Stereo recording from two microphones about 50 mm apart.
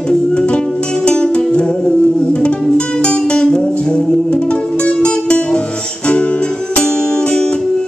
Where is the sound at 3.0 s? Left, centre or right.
Centre.